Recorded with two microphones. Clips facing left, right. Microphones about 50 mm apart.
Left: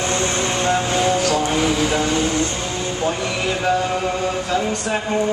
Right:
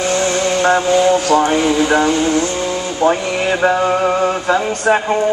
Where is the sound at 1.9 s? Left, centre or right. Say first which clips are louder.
Right 6 dB; right.